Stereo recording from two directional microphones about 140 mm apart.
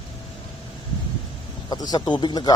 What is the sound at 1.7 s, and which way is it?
Speech, 30° left (ahead or behind).